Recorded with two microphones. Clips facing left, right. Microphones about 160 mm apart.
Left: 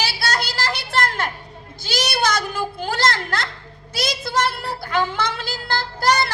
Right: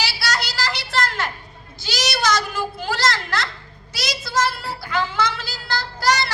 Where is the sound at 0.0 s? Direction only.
55° left (ahead or behind).